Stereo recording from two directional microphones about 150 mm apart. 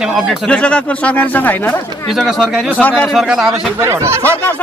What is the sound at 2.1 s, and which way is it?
Speech, centre (ahead or behind).